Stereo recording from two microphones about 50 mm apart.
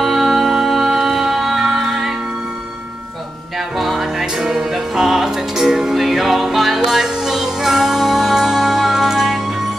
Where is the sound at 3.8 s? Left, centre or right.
Centre.